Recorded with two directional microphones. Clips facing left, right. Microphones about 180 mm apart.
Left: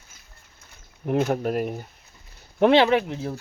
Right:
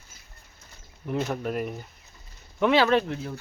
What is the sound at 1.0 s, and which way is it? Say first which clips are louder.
Speech: left 6 dB; 60° left (ahead or behind).